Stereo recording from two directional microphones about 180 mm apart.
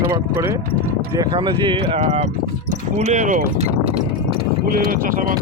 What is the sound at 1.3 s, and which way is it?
Speech, 30° right (ahead or behind).